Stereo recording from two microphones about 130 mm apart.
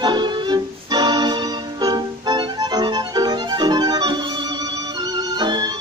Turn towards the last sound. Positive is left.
turn(degrees=-30)  # may be behind; listen again after turning